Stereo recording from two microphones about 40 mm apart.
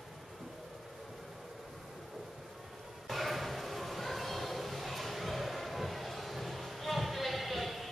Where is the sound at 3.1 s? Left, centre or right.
Centre.